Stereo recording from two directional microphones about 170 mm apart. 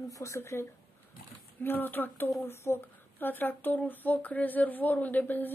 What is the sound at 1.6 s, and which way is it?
Speech, 10° left (ahead or behind).